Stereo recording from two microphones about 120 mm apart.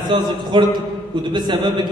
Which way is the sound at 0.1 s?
40° right (ahead or behind).